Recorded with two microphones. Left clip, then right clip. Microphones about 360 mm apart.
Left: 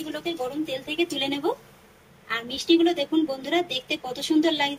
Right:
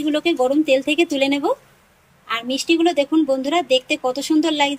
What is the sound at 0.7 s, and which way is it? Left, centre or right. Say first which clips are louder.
A woman's voice: right 9 dB; centre.